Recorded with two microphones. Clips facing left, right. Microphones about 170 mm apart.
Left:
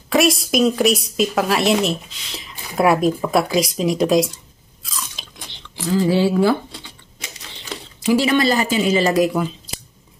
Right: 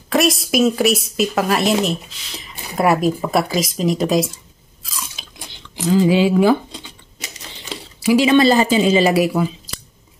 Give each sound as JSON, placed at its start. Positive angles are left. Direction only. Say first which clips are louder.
{"t": 0.1, "sound": "a woman's voice", "louder": "even", "side_deg": 0}
{"t": 5.2, "sound": "a sound", "louder": "left 1 dB", "side_deg": 0}
{"t": 5.8, "sound": "speech", "louder": "right 3 dB", "side_deg": -15}
{"t": 8.0, "sound": "speech", "louder": "right 2 dB", "side_deg": -10}
{"t": 8.3, "sound": "speech", "louder": "right 4 dB", "side_deg": -25}
{"t": 9.0, "sound": "speech", "louder": "right 1 dB", "side_deg": -5}